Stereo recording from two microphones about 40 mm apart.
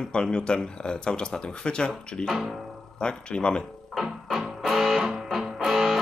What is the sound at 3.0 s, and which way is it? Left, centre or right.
Speech, left.